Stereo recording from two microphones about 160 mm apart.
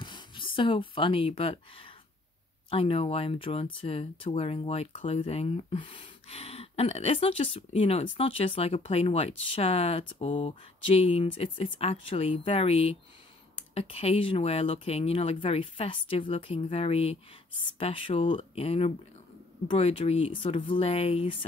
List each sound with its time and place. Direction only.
0.0 s speech: 30° left (ahead or behind)